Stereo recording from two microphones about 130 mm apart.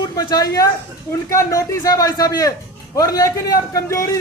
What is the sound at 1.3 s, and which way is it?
A man's voice, 25° left (ahead or behind).